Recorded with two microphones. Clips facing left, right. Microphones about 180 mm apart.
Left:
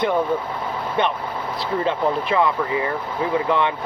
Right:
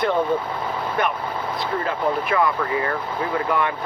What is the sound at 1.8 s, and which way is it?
Speech, 25° left (ahead or behind).